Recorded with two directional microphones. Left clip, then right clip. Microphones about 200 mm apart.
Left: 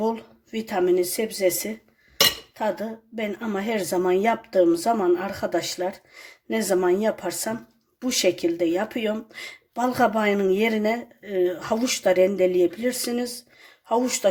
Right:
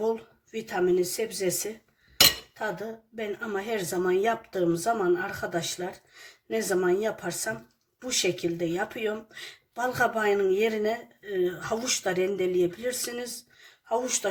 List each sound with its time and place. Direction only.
0.5 s speech: 40° left (ahead or behind)
2.6 s speech: 35° left (ahead or behind)